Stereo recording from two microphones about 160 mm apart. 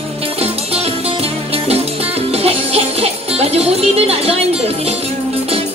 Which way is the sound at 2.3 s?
40° right (ahead or behind).